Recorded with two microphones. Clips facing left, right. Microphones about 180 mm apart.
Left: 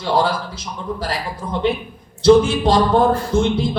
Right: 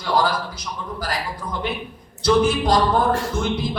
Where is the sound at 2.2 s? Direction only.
25° left (ahead or behind).